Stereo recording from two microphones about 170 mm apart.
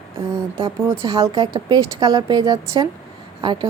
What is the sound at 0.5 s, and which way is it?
A woman's voice, 20° right (ahead or behind).